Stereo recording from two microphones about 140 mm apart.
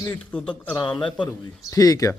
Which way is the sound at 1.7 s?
25° left (ahead or behind).